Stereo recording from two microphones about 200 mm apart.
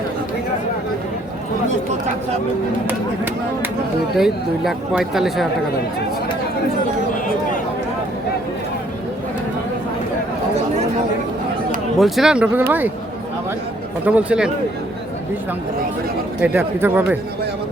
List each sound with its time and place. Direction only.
4.2 s speech: centre (ahead or behind)
11.9 s speech: centre (ahead or behind)
14.0 s speech: 5° right (ahead or behind)
16.4 s speech: 5° right (ahead or behind)